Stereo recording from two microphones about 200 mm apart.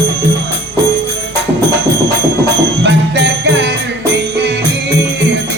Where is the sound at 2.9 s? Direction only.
60° right (ahead or behind).